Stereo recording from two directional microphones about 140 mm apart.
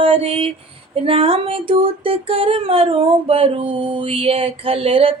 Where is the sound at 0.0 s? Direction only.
40° right (ahead or behind).